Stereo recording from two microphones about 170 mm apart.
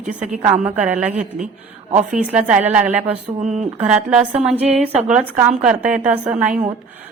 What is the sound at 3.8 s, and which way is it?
Speech, 5° right (ahead or behind).